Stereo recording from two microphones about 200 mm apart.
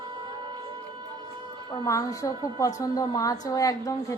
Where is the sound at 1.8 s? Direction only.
15° left (ahead or behind).